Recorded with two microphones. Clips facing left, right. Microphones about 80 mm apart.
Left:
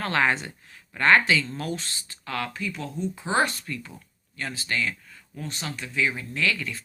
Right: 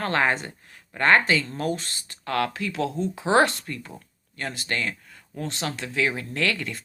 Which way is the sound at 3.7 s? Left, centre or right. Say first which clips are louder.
Even; right.